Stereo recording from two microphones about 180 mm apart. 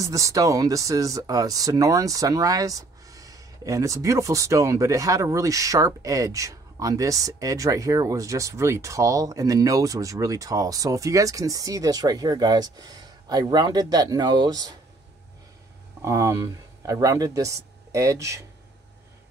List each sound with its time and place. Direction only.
0.0 s speech: 15° right (ahead or behind)
16.0 s speech: 15° right (ahead or behind)